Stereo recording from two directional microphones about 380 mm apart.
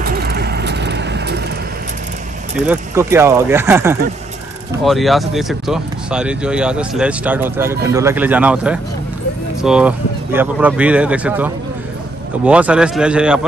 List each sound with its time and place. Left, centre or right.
0.1 s vehicle: right
2.6 s speech: centre